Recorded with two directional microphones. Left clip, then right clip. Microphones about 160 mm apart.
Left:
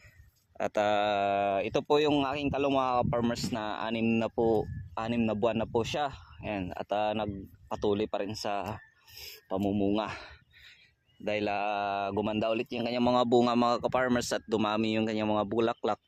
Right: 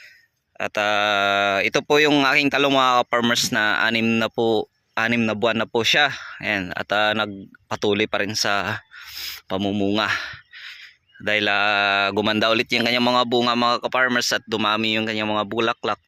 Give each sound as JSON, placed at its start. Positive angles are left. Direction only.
{"t": 0.6, "sound": "speech", "side_deg": 15}